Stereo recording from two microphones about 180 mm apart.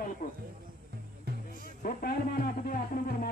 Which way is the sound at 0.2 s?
45° left (ahead or behind).